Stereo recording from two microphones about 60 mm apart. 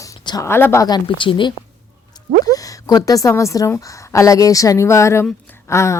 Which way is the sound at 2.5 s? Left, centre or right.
Left.